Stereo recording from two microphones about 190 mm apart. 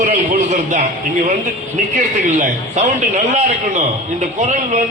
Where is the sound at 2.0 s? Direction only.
40° right (ahead or behind).